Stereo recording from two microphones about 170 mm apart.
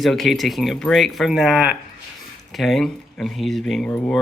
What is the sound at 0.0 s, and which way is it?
Speech, centre (ahead or behind).